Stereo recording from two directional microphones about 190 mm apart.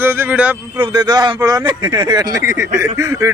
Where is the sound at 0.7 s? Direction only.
20° right (ahead or behind).